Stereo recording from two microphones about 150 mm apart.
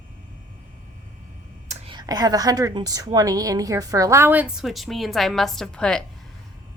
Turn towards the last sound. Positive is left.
turn(degrees=5)  # may be behind; listen again after turning